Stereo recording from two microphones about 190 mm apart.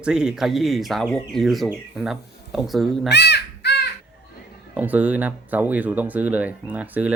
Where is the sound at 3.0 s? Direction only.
60° left (ahead or behind).